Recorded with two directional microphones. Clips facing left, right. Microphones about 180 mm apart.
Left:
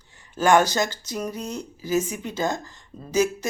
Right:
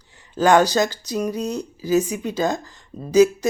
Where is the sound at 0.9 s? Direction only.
10° right (ahead or behind).